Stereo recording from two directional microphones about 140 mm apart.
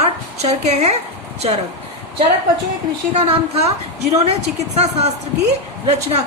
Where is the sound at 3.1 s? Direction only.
50° right (ahead or behind).